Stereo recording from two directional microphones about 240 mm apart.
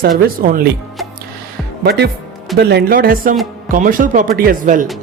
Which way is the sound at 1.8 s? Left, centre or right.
Right.